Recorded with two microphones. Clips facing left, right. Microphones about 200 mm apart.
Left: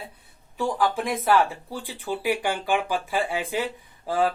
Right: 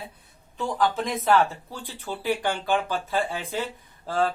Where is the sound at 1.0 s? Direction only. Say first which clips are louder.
Even; 15° left (ahead or behind).